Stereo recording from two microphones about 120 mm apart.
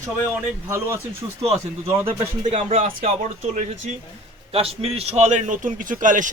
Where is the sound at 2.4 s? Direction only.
60° right (ahead or behind).